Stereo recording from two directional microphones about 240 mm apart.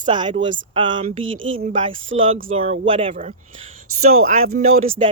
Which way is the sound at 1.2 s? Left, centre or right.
Right.